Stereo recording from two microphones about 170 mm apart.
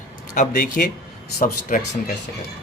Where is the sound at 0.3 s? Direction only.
55° left (ahead or behind).